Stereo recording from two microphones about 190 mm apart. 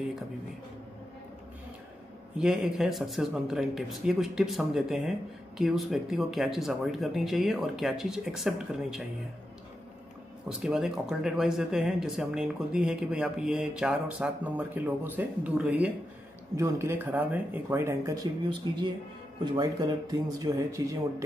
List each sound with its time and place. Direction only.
2.3 s speech: centre (ahead or behind)
10.6 s speech: centre (ahead or behind); by 20.9 s 20° right (ahead or behind)